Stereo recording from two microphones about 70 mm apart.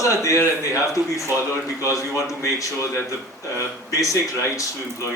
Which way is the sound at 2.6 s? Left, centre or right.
Left.